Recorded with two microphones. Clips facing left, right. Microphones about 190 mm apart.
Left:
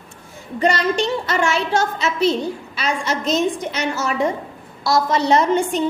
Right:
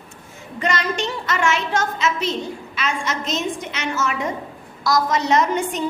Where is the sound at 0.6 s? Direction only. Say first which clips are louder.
Left 5 dB; 35° left (ahead or behind).